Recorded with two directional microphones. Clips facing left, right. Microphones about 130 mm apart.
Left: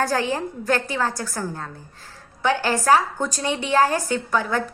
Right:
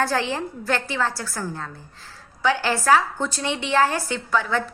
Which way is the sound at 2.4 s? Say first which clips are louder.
Left 1 dB; 50° left (ahead or behind).